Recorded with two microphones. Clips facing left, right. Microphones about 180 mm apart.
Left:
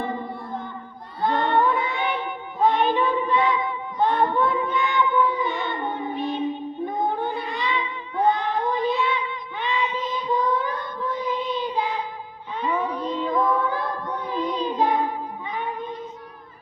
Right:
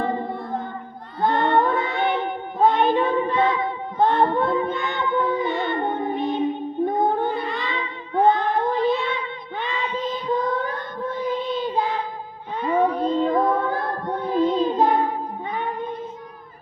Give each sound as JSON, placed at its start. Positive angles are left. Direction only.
{"t": 0.0, "sound": "music", "side_deg": -55}
{"t": 1.2, "sound": "child singing", "side_deg": -50}
{"t": 4.4, "sound": "music", "side_deg": -50}
{"t": 6.1, "sound": "music", "side_deg": -15}
{"t": 7.7, "sound": "cat", "side_deg": -45}
{"t": 10.1, "sound": "child singing", "side_deg": -55}
{"t": 12.6, "sound": "child singing", "side_deg": -50}
{"t": 14.8, "sound": "music", "side_deg": -50}